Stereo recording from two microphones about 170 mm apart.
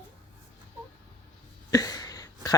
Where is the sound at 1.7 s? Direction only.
20° left (ahead or behind).